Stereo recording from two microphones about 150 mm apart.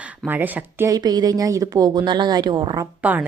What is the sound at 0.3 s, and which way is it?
Speech, 10° right (ahead or behind).